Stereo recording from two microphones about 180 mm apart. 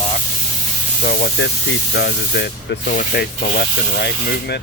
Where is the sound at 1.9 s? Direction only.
70° left (ahead or behind).